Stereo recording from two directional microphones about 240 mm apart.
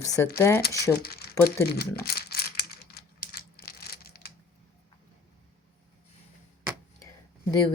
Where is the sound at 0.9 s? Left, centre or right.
Left.